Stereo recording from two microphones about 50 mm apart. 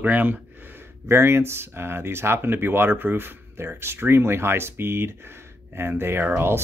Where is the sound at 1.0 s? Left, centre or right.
Right.